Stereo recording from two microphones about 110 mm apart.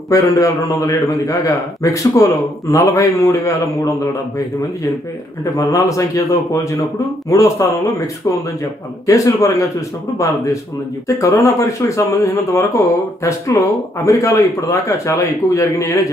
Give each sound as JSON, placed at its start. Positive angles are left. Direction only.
{"t": 0.1, "sound": "speech", "side_deg": 30}
{"t": 5.4, "sound": "a man's voice", "side_deg": 30}
{"t": 9.0, "sound": "speech", "side_deg": 30}